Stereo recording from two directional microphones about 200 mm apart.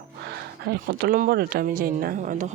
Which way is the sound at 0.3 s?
55° right (ahead or behind).